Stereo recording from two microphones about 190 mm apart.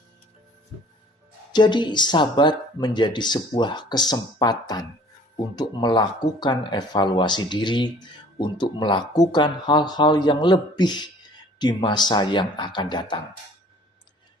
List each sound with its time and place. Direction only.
1.5 s speech: 25° left (ahead or behind)